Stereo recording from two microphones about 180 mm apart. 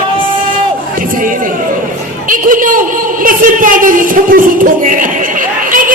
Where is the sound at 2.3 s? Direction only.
50° right (ahead or behind).